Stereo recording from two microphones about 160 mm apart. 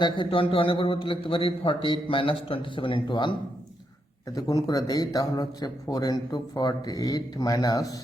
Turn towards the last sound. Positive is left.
turn(degrees=25)  # may be behind; listen again after turning